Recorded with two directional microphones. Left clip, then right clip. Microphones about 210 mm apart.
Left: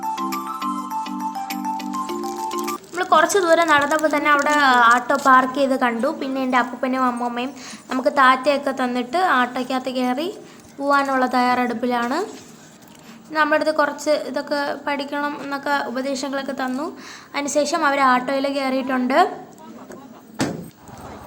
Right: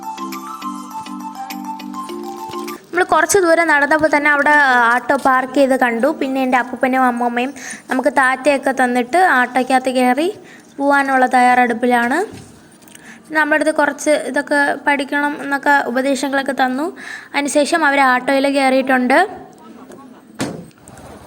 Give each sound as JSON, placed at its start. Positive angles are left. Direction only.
{"t": 0.2, "sound": "music", "side_deg": 0}
{"t": 2.9, "sound": "a woman's voice", "side_deg": -25}
{"t": 13.3, "sound": "a woman's voice", "side_deg": -15}